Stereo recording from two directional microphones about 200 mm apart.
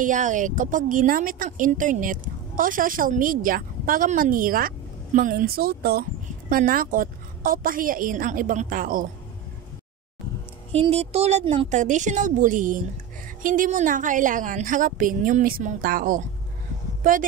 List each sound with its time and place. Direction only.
0.0 s speech: 40° right (ahead or behind)
10.7 s a woman's voice: 30° right (ahead or behind)